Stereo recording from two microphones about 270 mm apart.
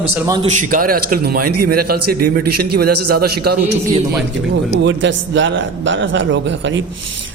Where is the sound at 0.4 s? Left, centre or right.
Right.